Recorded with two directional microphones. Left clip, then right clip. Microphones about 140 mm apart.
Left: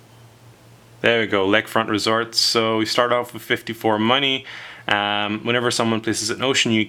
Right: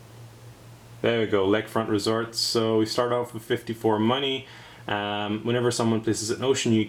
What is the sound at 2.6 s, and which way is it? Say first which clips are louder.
Speech: left 5 dB; 40° left (ahead or behind).